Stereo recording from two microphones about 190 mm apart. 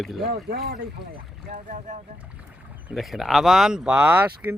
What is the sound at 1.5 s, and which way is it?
Speech, 45° right (ahead or behind).